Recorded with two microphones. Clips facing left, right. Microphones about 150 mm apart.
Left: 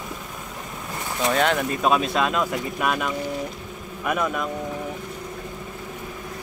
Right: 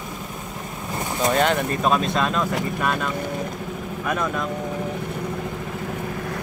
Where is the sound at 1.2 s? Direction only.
Centre (ahead or behind).